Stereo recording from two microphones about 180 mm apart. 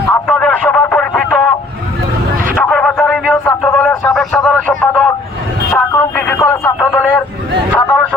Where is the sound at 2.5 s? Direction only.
10° left (ahead or behind).